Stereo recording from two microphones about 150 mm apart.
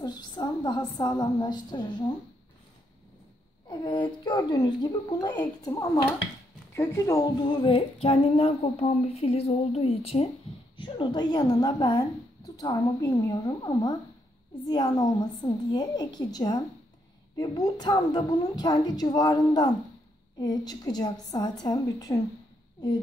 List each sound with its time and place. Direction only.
0.0 s a woman's voice: 30° left (ahead or behind)
3.6 s a woman's voice: 30° left (ahead or behind)